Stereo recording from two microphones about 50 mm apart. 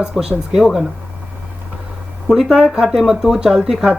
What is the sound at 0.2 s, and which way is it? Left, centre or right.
Speech, centre.